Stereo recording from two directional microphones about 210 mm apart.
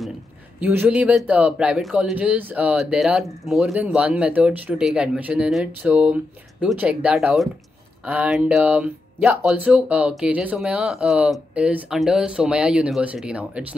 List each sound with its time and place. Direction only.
0.6 s speech: 5° right (ahead or behind)